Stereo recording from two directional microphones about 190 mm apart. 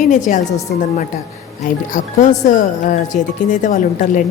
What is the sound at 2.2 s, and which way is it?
Speech, 40° left (ahead or behind).